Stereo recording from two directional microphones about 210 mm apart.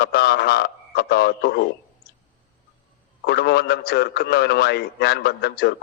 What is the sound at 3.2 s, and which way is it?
A man's voice, 50° left (ahead or behind).